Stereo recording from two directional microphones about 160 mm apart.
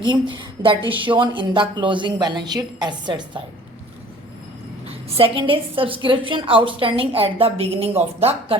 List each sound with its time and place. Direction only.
0.0 s a woman's voice: 30° right (ahead or behind)
5.1 s a woman's voice: 35° right (ahead or behind)